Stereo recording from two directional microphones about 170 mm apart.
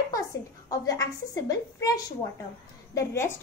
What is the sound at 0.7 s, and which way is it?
A woman's voice, 20° left (ahead or behind).